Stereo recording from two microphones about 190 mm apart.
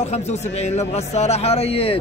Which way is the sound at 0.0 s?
35° left (ahead or behind).